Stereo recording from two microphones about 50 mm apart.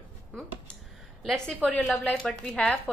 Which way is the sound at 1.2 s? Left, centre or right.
Centre.